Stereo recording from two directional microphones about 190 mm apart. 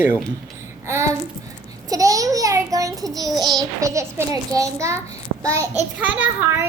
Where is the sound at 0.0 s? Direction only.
10° right (ahead or behind).